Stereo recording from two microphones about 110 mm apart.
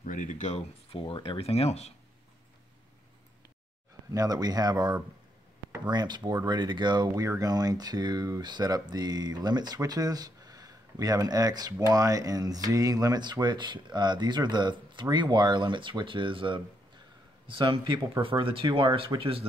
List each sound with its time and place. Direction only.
0.3 s speech: 90° left; by 2.0 s 75° left (ahead or behind)
4.1 s speech: 35° right (ahead or behind); by 19.4 s 55° right (ahead or behind)